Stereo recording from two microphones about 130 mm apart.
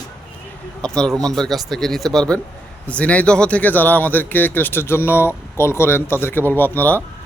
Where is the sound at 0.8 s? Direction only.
5° left (ahead or behind).